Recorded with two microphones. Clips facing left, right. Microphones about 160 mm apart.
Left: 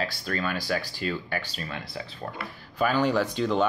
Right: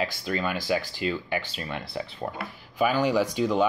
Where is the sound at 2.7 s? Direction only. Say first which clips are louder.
Right 1 dB; 10° right (ahead or behind).